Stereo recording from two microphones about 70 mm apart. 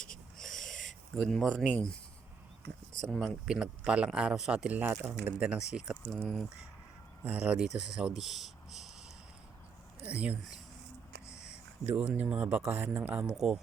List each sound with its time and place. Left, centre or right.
0.0 s a sound: centre
3.1 s speech: centre
3.4 s speech: centre
6.1 s speech: centre
7.3 s speech: centre
10.0 s speech: centre
11.9 s speech: centre
13.3 s speech: centre